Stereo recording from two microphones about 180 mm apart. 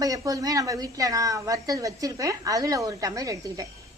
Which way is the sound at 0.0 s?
20° right (ahead or behind).